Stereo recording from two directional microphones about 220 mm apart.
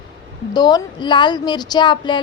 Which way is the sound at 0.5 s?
20° left (ahead or behind).